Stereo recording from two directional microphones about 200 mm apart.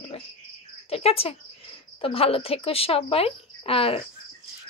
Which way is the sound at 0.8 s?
30° left (ahead or behind).